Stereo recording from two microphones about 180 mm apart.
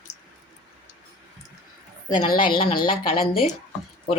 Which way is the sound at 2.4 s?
25° left (ahead or behind).